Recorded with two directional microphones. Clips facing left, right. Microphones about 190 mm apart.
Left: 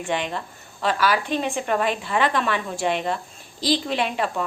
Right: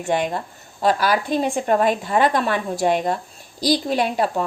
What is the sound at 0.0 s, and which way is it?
A woman's voice, 45° right (ahead or behind).